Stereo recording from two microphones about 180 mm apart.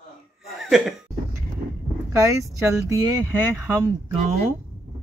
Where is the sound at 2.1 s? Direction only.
15° right (ahead or behind).